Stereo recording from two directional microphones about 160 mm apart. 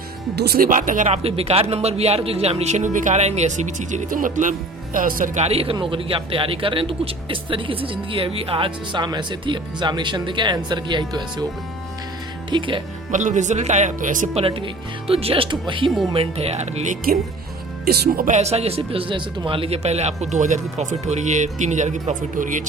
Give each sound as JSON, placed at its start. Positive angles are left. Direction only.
{"t": 0.3, "sound": "a man's voice", "side_deg": -75}
{"t": 12.5, "sound": "speech", "side_deg": -30}
{"t": 13.1, "sound": "a man's voice", "side_deg": -50}
{"t": 14.4, "sound": "a man's voice", "side_deg": -35}
{"t": 17.8, "sound": "speech", "side_deg": -75}
{"t": 18.3, "sound": "a man's voice", "side_deg": -45}